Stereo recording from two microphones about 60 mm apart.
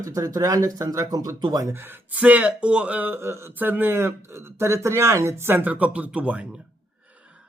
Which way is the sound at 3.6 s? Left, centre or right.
Right.